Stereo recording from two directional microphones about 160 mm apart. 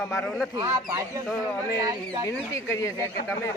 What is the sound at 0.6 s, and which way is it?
Speech, 20° right (ahead or behind).